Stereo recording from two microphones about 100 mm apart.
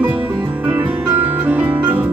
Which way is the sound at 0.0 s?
15° right (ahead or behind).